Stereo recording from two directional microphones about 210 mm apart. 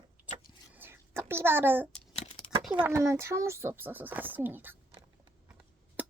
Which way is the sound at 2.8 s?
15° right (ahead or behind).